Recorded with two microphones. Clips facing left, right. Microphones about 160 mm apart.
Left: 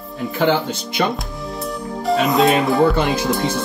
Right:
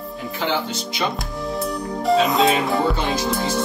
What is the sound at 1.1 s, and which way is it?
Music, centre (ahead or behind).